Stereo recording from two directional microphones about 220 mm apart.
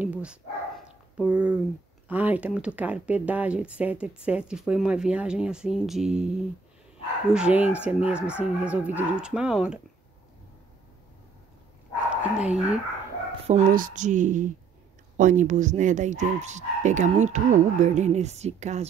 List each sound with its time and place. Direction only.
0.0 s dog: 5° right (ahead or behind)
1.2 s speech: 5° right (ahead or behind)
12.2 s speech: 5° right (ahead or behind)
13.5 s speech: 35° right (ahead or behind)